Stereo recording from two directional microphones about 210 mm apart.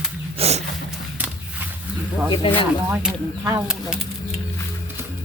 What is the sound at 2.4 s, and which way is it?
Speech, 25° left (ahead or behind).